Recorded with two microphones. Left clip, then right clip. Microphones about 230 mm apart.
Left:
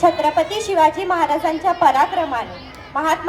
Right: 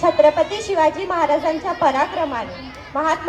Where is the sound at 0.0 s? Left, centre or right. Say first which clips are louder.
Right 1 dB; left.